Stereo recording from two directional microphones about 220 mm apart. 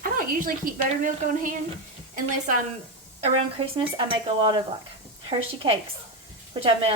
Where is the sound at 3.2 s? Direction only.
30° right (ahead or behind).